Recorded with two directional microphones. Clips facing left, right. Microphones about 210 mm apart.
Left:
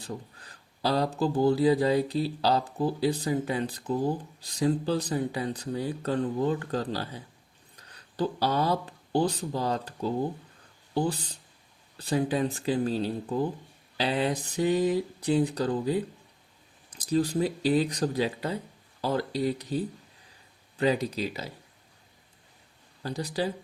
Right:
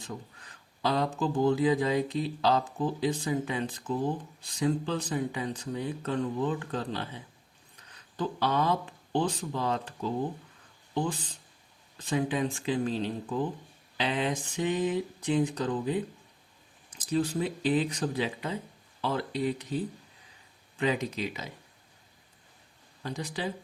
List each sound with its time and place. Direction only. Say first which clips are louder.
0.0 s speech: left 3 dB; 35° left (ahead or behind)
23.0 s speech: left 4 dB; 35° left (ahead or behind)